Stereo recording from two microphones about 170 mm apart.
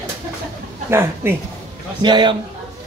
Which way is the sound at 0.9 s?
15° right (ahead or behind).